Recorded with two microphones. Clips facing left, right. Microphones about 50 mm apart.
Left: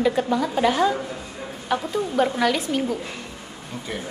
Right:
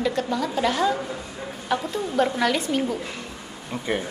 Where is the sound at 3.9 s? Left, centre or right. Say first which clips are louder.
Right 6 dB; right.